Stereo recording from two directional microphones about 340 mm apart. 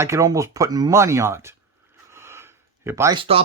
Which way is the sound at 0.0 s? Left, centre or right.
Centre.